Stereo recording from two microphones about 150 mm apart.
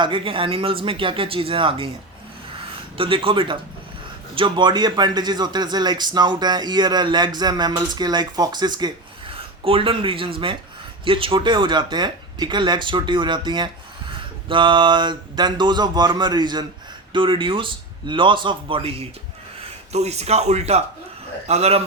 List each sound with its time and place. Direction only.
0.0 s speech: 35° right (ahead or behind)
3.0 s a man's voice: 35° right (ahead or behind)